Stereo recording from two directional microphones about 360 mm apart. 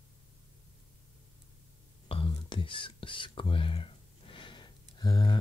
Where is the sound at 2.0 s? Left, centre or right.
Centre.